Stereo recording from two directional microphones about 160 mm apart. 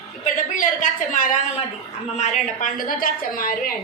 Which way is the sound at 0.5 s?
55° left (ahead or behind).